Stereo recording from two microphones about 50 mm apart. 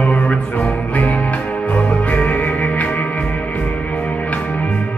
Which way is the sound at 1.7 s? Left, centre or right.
Left.